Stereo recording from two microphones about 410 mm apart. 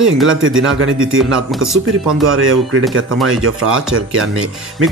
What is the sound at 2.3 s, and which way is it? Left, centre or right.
A man's voice, right.